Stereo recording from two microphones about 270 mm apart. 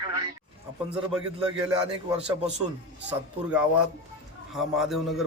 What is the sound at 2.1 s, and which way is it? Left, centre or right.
Speech, right.